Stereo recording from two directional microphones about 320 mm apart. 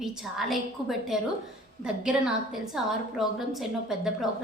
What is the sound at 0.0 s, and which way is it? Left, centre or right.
A woman's voice, centre.